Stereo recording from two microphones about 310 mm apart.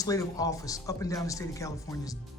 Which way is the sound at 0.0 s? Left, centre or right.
Centre.